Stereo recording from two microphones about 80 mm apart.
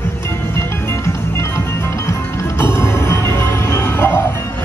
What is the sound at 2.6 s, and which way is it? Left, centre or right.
Music, left.